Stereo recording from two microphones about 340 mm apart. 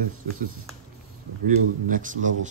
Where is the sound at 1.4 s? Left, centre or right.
Right.